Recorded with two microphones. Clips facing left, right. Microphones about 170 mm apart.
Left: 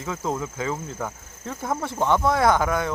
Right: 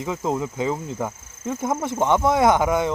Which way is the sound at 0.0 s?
20° right (ahead or behind).